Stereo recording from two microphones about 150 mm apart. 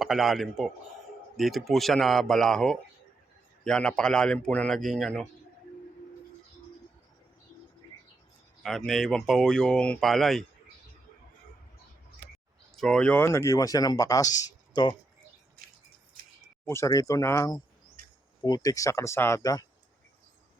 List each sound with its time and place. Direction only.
0.0 s speech: centre (ahead or behind)
8.6 s speech: centre (ahead or behind)
12.7 s speech: 5° left (ahead or behind); by 14.9 s 30° left (ahead or behind)
16.6 s speech: 20° left (ahead or behind)